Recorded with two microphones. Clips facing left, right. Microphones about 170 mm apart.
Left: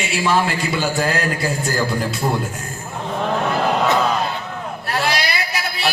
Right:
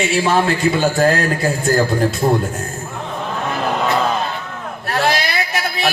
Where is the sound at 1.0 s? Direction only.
50° right (ahead or behind).